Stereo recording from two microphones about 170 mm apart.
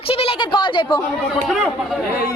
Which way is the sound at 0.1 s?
35° left (ahead or behind).